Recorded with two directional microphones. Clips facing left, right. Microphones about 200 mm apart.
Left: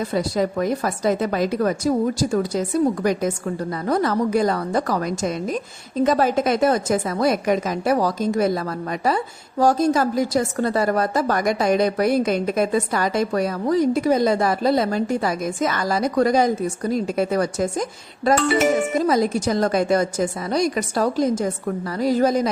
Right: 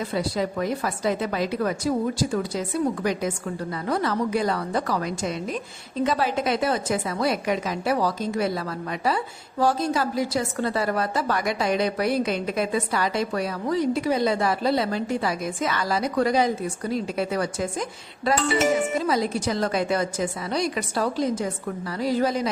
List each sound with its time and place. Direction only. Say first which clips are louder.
0.1 s a woman's voice: left 4 dB; 45° left (ahead or behind)
18.9 s a woman's voice: left 5 dB; 45° left (ahead or behind)